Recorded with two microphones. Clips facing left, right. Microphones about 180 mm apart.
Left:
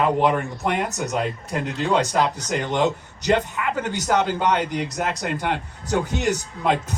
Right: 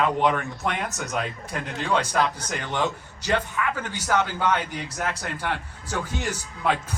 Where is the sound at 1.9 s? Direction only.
15° left (ahead or behind).